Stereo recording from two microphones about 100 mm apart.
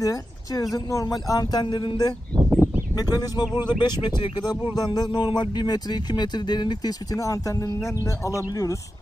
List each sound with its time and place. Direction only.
0.0 s speech: 35° left (ahead or behind)
2.5 s a sound: 20° right (ahead or behind)
3.0 s speech: 40° left (ahead or behind)